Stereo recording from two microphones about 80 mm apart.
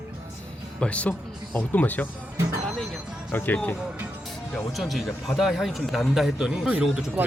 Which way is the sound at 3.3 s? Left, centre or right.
Left.